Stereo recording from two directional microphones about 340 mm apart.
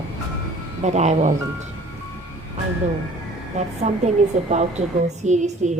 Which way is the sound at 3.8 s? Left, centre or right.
Centre.